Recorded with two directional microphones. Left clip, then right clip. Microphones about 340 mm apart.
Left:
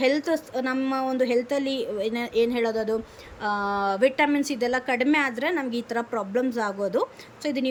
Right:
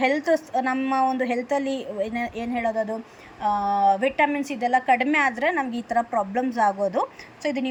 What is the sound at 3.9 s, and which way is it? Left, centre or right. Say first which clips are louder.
A woman's voice: right 1 dB; centre.